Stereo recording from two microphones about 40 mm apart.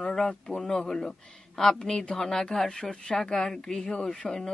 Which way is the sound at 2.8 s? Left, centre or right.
Left.